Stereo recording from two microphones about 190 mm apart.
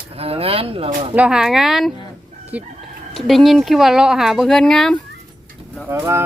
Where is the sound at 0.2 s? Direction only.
30° right (ahead or behind).